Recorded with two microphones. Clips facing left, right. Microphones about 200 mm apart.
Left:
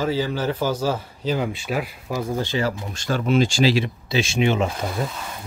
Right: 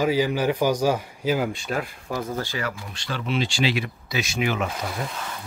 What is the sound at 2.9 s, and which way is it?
Speech, 45° left (ahead or behind).